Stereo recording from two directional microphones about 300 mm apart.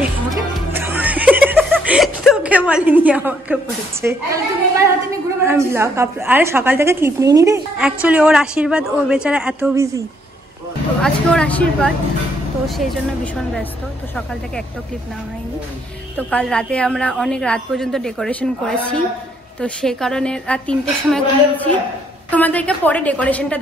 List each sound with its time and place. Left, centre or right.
0.3 s music: centre
4.0 s a woman's voice: centre
11.0 s a woman's voice: centre
16.2 s a woman's voice: centre